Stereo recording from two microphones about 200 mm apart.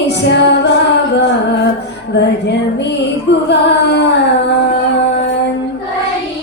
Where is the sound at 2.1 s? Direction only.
60° left (ahead or behind).